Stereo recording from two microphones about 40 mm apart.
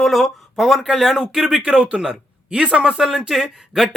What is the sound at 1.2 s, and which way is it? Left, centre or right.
Speech, centre.